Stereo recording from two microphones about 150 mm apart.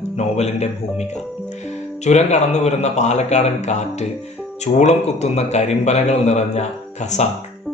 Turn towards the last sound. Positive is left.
turn(degrees=50)  # may be behind; listen again after turning